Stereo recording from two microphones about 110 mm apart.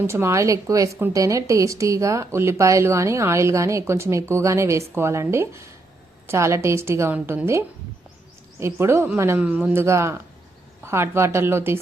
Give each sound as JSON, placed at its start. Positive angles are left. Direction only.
{"t": 0.1, "sound": "speech", "side_deg": -25}
{"t": 7.1, "sound": "a woman's voice", "side_deg": -15}
{"t": 8.5, "sound": "speech", "side_deg": -25}
{"t": 9.4, "sound": "a woman's voice", "side_deg": -10}
{"t": 9.7, "sound": "speech", "side_deg": -25}